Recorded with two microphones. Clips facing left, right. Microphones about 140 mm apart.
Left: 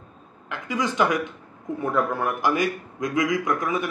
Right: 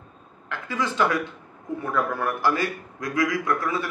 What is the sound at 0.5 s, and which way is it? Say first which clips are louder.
A man's voice: left 2 dB; 15° left (ahead or behind).